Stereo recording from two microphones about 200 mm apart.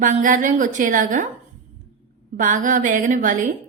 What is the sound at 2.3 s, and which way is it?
A woman's voice, 40° right (ahead or behind).